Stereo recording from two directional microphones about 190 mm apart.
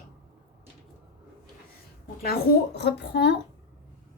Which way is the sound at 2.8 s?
60° left (ahead or behind).